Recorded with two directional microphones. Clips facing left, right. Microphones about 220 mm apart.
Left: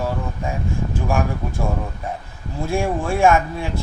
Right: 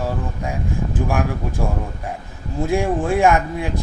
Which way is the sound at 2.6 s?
15° right (ahead or behind).